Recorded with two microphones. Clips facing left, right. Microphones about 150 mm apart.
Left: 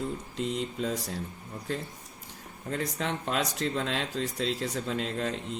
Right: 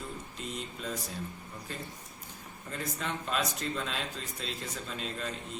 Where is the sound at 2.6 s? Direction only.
70° left (ahead or behind); by 4.7 s 85° left.